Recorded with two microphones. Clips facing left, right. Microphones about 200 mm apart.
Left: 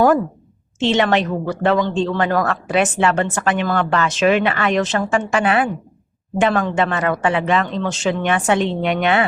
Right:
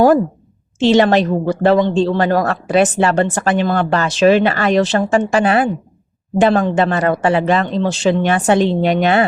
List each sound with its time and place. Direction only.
0.8 s a man's voice: 35° right (ahead or behind)